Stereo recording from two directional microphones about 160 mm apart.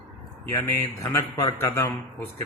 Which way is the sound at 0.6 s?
20° left (ahead or behind).